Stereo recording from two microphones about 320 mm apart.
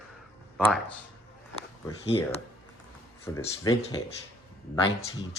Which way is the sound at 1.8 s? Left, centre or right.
Centre.